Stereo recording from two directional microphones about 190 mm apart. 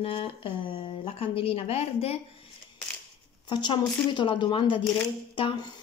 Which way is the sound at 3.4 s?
25° left (ahead or behind).